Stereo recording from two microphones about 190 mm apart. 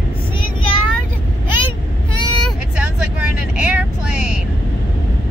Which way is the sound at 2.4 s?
5° right (ahead or behind).